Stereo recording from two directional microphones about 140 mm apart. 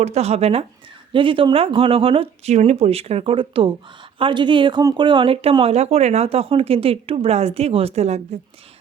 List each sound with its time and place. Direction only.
0.0 s speech: 50° right (ahead or behind)
1.1 s speech: 35° right (ahead or behind)